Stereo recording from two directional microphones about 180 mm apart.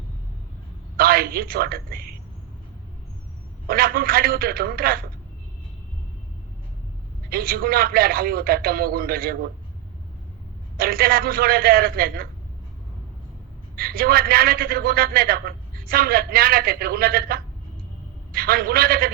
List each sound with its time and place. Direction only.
0.9 s a man's voice: 55° right (ahead or behind)
3.7 s a man's voice: 55° right (ahead or behind)
7.3 s a man's voice: 55° right (ahead or behind)
10.8 s a man's voice: 55° right (ahead or behind)
13.7 s a man's voice: 55° right (ahead or behind)